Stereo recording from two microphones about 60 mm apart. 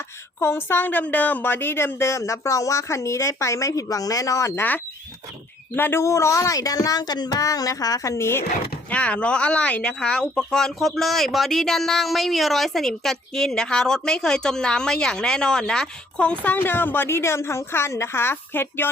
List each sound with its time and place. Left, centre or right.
0.3 s a woman's voice: left
5.7 s a woman's voice: left
6.0 s speech: left
8.2 s a woman's voice: left
8.9 s speech: left
16.4 s a woman's voice: left